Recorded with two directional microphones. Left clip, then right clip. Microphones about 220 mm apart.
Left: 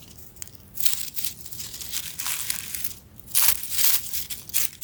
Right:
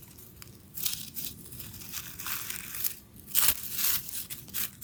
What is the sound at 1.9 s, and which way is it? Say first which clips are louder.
Crumpling: left 6 dB; 10° left (ahead or behind).